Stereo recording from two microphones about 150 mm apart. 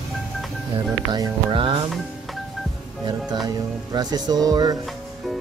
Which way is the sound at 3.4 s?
25° right (ahead or behind).